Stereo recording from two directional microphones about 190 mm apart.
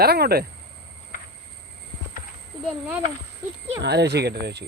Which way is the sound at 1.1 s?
45° left (ahead or behind).